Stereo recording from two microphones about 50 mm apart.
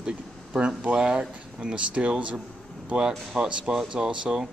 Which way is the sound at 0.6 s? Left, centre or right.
Right.